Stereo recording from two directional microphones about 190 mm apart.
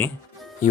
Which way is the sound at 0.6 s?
40° left (ahead or behind).